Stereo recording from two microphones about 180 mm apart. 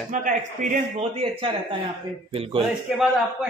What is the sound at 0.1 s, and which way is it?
A man's voice, 45° right (ahead or behind).